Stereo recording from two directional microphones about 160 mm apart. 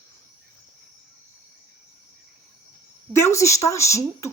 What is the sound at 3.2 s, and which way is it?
A woman's voice, 20° left (ahead or behind).